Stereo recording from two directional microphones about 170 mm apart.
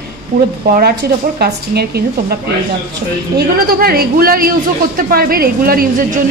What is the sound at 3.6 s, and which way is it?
A woman's voice, 60° right (ahead or behind).